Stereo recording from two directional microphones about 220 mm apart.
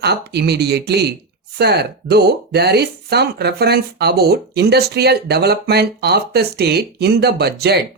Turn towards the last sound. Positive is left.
turn(degrees=-45)  # may be behind; listen again after turning